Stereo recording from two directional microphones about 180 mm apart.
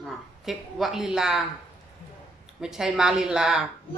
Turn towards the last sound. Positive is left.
turn(degrees=-5)  # may be behind; listen again after turning